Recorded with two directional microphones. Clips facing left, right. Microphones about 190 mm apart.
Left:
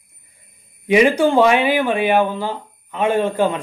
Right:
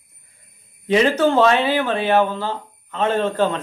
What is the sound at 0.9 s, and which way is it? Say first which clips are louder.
A man's voice: left 2 dB; 15° left (ahead or behind).